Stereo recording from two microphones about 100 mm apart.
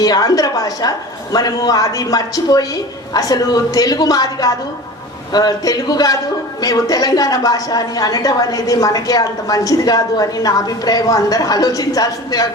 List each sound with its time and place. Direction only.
0.0 s a woman's voice: 40° left (ahead or behind)